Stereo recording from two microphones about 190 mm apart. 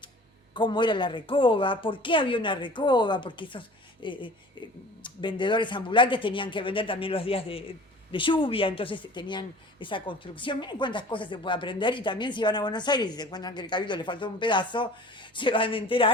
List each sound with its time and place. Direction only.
0.5 s a woman's voice: 25° left (ahead or behind)